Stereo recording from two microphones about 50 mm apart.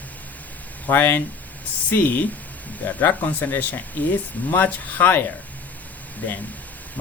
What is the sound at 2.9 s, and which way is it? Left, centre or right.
Speech, left.